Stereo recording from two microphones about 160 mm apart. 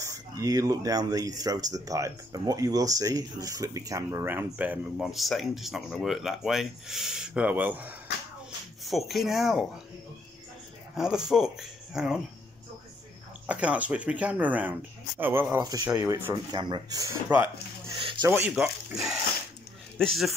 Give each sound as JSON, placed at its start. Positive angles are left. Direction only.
{"t": 0.4, "sound": "speech", "side_deg": -20}
{"t": 8.8, "sound": "speech", "side_deg": 0}
{"t": 11.0, "sound": "speech", "side_deg": -5}
{"t": 13.5, "sound": "speech", "side_deg": -10}
{"t": 16.1, "sound": "speech", "side_deg": -15}
{"t": 16.5, "sound": "speech", "side_deg": -30}
{"t": 17.9, "sound": "a sound", "side_deg": -30}
{"t": 18.5, "sound": "speech", "side_deg": -5}